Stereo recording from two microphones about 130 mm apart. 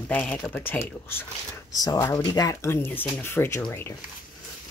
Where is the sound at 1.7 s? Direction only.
30° left (ahead or behind).